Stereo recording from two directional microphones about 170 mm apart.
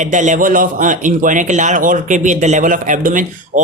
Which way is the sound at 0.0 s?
45° right (ahead or behind).